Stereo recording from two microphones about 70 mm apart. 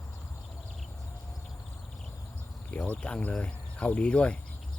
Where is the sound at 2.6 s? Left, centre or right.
Centre.